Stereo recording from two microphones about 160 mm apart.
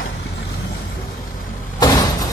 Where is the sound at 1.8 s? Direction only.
25° left (ahead or behind).